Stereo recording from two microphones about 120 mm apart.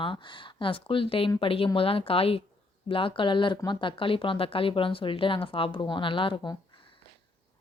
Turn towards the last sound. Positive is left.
turn(degrees=40)  # may be behind; listen again after turning